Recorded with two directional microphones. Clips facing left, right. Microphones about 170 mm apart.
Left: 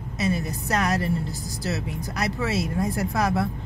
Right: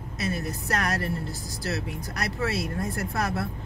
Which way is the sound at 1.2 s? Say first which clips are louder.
Left 2 dB; centre (ahead or behind).